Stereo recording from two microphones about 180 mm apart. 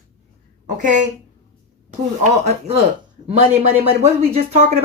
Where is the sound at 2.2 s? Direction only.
35° right (ahead or behind).